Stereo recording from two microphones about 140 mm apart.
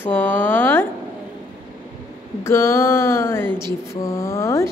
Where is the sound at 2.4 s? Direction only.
20° left (ahead or behind).